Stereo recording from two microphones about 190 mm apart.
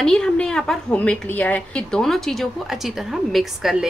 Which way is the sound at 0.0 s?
5° left (ahead or behind).